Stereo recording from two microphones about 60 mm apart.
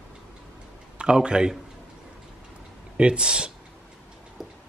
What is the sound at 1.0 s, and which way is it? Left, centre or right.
Speech, centre.